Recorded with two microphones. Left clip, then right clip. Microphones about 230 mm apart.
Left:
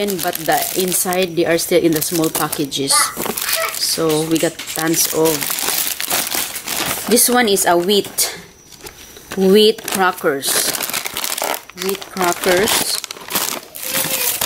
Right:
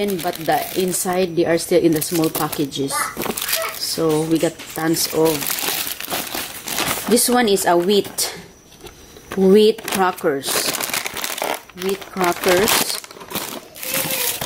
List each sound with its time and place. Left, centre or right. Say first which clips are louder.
0.0 s speech: left 2 dB; centre
3.2 s a sound: left 2 dB; centre
3.9 s speech: even; right
4.3 s speech: left 2 dB; centre
5.5 s crumpling: left 2 dB; centre
6.9 s speech: left 2 dB; centre
10.7 s crumpling: left 1 dB; centre
13.9 s a sound: left 2 dB; centre